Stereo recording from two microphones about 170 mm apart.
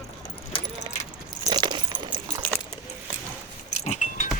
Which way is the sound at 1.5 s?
25° right (ahead or behind).